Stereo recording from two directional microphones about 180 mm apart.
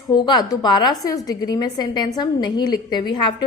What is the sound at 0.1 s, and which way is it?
A woman's voice, 25° left (ahead or behind).